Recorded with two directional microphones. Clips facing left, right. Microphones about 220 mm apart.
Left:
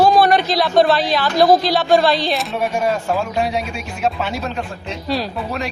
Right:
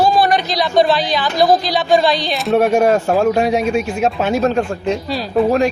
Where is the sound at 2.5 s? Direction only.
60° right (ahead or behind).